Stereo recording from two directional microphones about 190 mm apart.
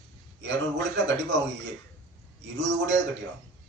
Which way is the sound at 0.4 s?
70° right (ahead or behind).